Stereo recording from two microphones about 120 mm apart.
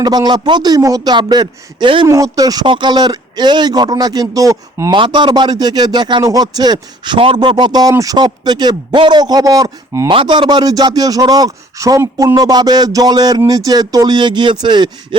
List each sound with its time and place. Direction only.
0.0 s speech: 35° right (ahead or behind)
2.0 s speech: 30° right (ahead or behind)
4.9 s speech: 40° right (ahead or behind); by 10.1 s 25° right (ahead or behind)
10.1 s speech: 40° right (ahead or behind)